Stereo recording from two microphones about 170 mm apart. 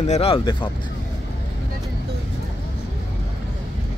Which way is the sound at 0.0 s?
40° left (ahead or behind).